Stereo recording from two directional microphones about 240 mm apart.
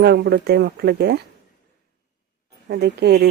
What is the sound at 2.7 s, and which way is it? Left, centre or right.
Speech, right.